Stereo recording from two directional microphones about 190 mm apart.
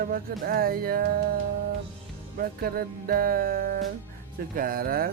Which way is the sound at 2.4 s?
50° right (ahead or behind).